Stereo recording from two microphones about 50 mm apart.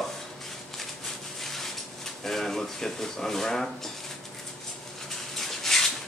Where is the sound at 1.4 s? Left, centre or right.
Centre.